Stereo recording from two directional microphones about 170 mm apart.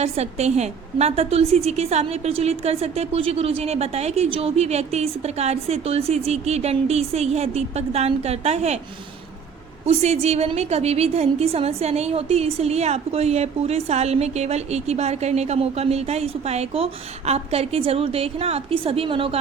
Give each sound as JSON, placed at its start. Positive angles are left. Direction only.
{"t": 0.0, "sound": "a woman's voice", "side_deg": -40}
{"t": 9.8, "sound": "a woman's voice", "side_deg": -40}